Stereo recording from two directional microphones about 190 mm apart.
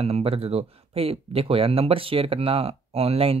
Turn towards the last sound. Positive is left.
turn(degrees=-30)  # may be behind; listen again after turning